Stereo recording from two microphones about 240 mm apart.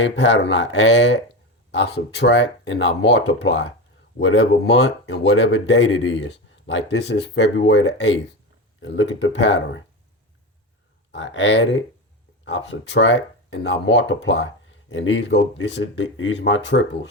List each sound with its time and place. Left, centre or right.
0.0 s speech: left
11.1 s speech: left